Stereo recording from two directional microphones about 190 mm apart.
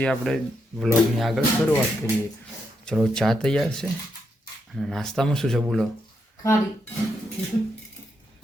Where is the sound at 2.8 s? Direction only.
5° left (ahead or behind).